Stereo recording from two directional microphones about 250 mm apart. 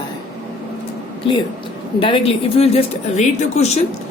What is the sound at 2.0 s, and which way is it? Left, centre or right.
Speech, left.